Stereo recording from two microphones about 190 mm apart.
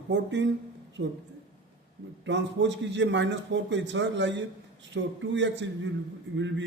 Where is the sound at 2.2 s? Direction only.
70° right (ahead or behind).